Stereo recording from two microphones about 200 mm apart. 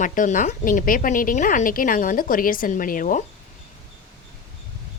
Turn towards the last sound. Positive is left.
turn(degrees=45)  # may be behind; listen again after turning